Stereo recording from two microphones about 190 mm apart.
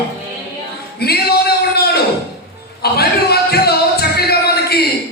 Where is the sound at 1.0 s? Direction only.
55° left (ahead or behind).